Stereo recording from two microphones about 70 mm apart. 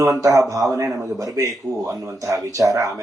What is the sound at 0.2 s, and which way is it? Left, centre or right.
Speech, right.